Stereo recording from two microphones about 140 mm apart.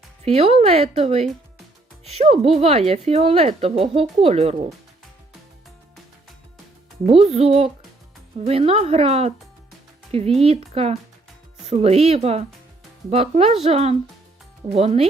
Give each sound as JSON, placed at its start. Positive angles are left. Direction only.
{"t": 0.3, "sound": "a woman's voice", "side_deg": -45}
{"t": 7.1, "sound": "a woman's voice", "side_deg": -45}